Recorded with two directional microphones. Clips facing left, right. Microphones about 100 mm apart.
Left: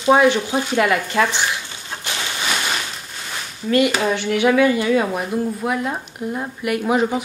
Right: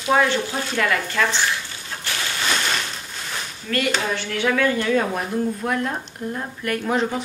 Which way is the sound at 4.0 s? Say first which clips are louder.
Left 6 dB; 15° left (ahead or behind).